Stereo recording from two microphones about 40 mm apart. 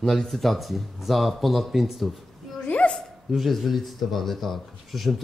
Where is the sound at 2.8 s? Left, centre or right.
Left.